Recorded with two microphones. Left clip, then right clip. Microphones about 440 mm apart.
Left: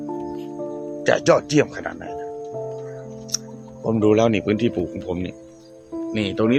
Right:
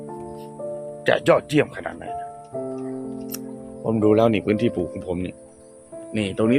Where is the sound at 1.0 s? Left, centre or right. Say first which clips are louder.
Left 1 dB; centre.